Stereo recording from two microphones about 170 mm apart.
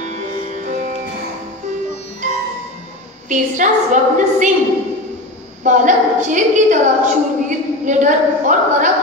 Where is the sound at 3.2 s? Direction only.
45° right (ahead or behind).